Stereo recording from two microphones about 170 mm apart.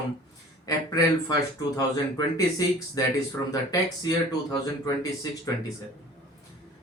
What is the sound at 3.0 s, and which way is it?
Speech, 20° left (ahead or behind).